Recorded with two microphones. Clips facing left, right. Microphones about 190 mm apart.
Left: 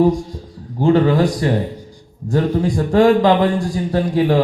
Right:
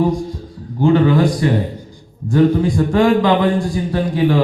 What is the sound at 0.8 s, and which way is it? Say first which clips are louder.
Mantra: right 1 dB; 35° left (ahead or behind).